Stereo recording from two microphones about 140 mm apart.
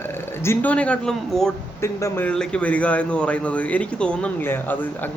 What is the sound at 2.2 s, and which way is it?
A man's voice, 5° left (ahead or behind).